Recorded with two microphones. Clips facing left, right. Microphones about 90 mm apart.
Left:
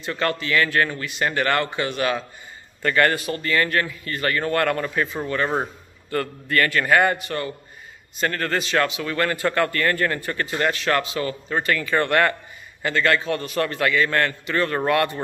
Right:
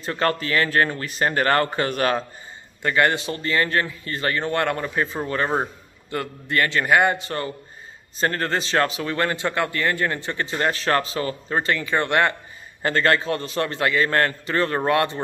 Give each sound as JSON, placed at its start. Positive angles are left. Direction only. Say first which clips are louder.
{"t": 0.0, "sound": "speech", "louder": "right 2 dB", "side_deg": -35}
{"t": 2.8, "sound": "a man's voice", "louder": "even", "side_deg": -20}
{"t": 5.0, "sound": "speech", "louder": "even", "side_deg": -35}
{"t": 5.5, "sound": "a man's voice", "louder": "right 1 dB", "side_deg": -15}
{"t": 7.2, "sound": "a man's voice", "louder": "even", "side_deg": -35}
{"t": 12.8, "sound": "a man's voice", "louder": "right 1 dB", "side_deg": -35}